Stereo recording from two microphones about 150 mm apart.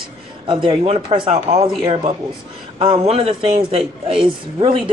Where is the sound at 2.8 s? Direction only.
40° right (ahead or behind).